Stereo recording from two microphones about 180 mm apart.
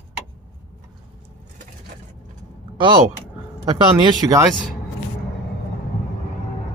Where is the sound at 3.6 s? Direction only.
30° right (ahead or behind).